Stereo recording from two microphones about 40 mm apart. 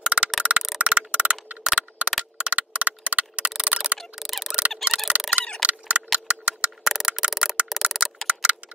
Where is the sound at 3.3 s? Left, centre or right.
Right.